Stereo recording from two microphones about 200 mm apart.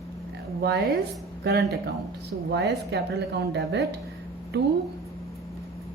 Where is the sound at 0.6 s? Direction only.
55° right (ahead or behind).